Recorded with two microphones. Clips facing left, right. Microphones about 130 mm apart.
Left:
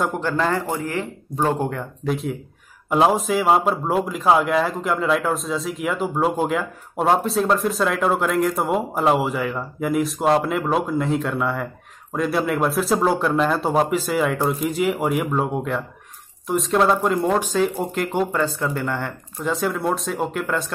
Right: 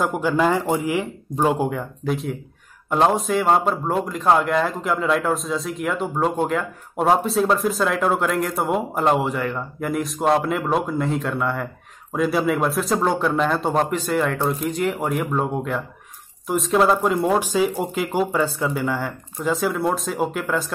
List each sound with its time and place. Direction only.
0.0 s a man's voice: 5° right (ahead or behind)